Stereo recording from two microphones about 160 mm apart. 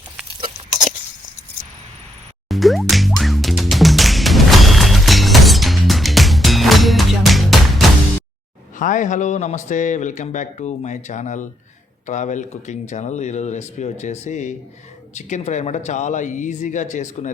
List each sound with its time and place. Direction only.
2.5 s music: centre (ahead or behind)
8.8 s a man's voice: 50° left (ahead or behind)